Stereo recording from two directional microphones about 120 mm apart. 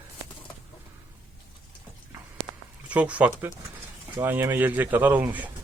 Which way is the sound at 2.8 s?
10° right (ahead or behind).